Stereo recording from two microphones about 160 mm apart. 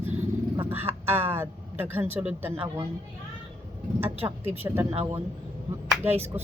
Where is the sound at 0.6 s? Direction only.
15° right (ahead or behind).